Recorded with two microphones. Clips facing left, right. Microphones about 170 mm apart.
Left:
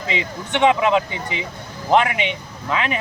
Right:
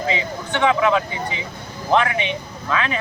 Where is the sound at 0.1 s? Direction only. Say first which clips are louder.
Left 5 dB; 20° left (ahead or behind).